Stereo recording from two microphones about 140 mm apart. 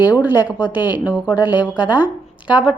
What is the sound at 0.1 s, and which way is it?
Speech, 10° right (ahead or behind).